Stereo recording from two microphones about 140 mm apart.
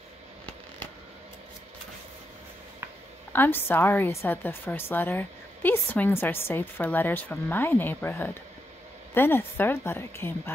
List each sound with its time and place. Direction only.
3.3 s a woman's voice: 15° left (ahead or behind)